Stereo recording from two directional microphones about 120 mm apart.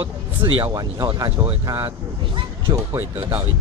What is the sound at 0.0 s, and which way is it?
Speech, 45° right (ahead or behind).